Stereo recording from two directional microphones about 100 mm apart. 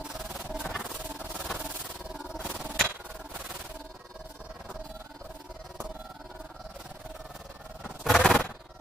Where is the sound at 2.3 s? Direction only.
10° right (ahead or behind).